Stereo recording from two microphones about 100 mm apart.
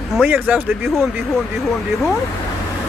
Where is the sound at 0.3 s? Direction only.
20° right (ahead or behind).